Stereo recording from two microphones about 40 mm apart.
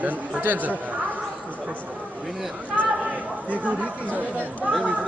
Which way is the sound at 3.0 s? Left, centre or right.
Right.